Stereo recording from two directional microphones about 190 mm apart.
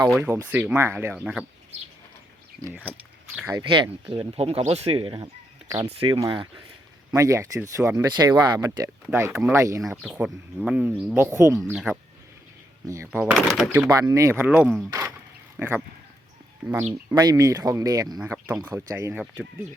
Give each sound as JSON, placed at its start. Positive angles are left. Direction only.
{"t": 0.2, "sound": "speech", "side_deg": -10}
{"t": 3.5, "sound": "speech", "side_deg": -25}
{"t": 7.2, "sound": "speech", "side_deg": -15}
{"t": 9.9, "sound": "speech", "side_deg": -5}
{"t": 11.7, "sound": "speech", "side_deg": -5}
{"t": 13.1, "sound": "speech", "side_deg": 0}
{"t": 14.1, "sound": "speech", "side_deg": -15}
{"t": 15.5, "sound": "speech", "side_deg": -15}
{"t": 17.2, "sound": "speech", "side_deg": -20}
{"t": 18.2, "sound": "speech", "side_deg": -10}